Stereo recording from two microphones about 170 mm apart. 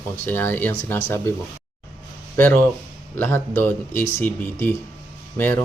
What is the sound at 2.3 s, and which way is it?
Speech, 10° left (ahead or behind).